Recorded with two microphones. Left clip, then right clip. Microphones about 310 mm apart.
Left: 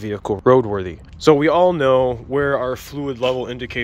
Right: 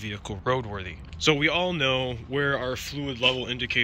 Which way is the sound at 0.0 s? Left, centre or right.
Centre.